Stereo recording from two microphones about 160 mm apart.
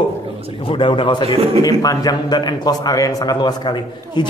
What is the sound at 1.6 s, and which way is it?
A man's voice, 20° left (ahead or behind).